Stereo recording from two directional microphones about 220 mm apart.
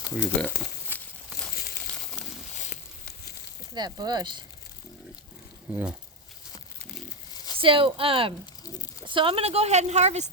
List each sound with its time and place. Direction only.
0.2 s speech: 10° left (ahead or behind)
1.5 s crumpling: 45° left (ahead or behind)
3.8 s a woman's voice: 20° right (ahead or behind)
5.7 s speech: 5° right (ahead or behind)
7.3 s a sound: 20° left (ahead or behind)
7.6 s a woman's voice: 25° right (ahead or behind)